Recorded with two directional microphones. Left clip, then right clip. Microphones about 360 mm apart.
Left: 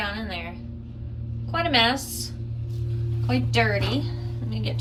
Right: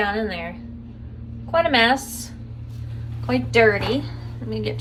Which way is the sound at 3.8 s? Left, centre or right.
Centre.